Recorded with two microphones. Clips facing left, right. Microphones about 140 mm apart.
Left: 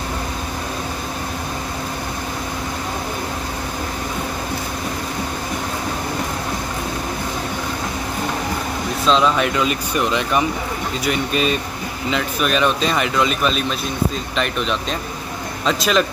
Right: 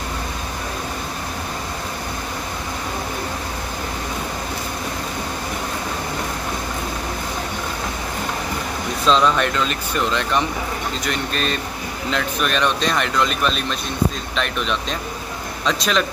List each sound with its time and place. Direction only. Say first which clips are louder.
9.0 s speech: even; 5° left (ahead or behind)